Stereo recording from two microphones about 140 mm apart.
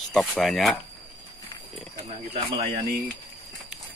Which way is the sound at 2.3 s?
45° right (ahead or behind).